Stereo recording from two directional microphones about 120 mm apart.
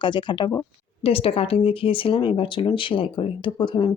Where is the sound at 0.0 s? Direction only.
40° left (ahead or behind).